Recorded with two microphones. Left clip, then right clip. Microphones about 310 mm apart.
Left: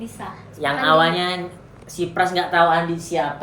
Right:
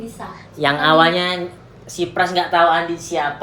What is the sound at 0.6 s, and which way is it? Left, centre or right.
A woman's voice, right.